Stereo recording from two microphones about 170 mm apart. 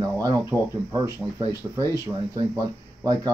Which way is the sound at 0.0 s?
20° right (ahead or behind).